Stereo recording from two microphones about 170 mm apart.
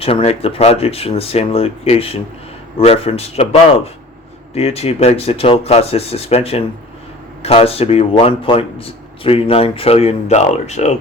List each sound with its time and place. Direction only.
0.0 s speech: 35° left (ahead or behind)